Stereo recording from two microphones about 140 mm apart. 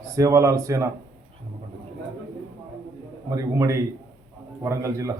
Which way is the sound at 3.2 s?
25° right (ahead or behind).